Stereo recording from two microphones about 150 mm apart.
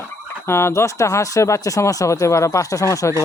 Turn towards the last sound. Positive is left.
turn(degrees=20)  # may be behind; listen again after turning